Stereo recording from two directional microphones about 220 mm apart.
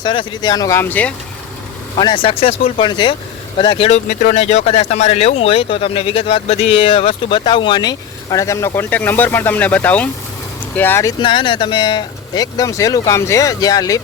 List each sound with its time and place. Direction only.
0.0 s speech: 20° left (ahead or behind)
2.0 s speech: 20° left (ahead or behind)
11.2 s speech: 20° left (ahead or behind)